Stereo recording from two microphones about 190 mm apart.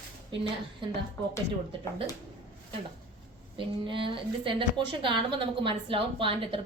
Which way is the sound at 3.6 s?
25° right (ahead or behind).